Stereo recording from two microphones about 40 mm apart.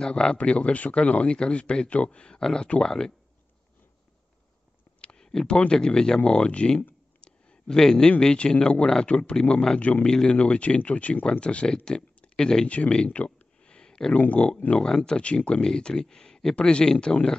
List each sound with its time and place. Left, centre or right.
0.0 s speech: centre
0.3 s speech: left
5.0 s a sound: left
5.7 s speech: centre
7.2 s a sound: left
7.8 s speech: centre
10.3 s speech: left
12.6 s speech: left
13.6 s a sound: left
14.1 s speech: left
14.7 s speech: left